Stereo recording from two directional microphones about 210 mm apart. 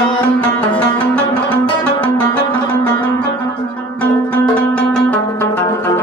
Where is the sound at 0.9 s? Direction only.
5° left (ahead or behind).